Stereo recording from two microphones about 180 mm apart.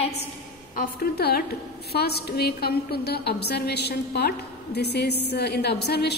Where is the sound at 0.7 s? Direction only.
60° left (ahead or behind).